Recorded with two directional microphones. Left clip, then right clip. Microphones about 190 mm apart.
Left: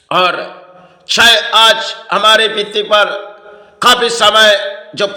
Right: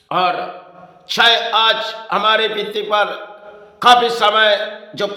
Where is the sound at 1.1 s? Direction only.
15° left (ahead or behind).